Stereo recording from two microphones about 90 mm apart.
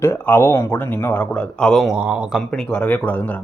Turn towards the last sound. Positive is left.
turn(degrees=20)  # may be behind; listen again after turning